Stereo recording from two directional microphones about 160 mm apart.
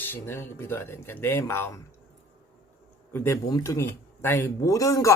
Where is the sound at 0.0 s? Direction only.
15° left (ahead or behind).